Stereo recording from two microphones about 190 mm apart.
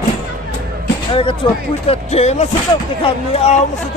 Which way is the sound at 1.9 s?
35° left (ahead or behind).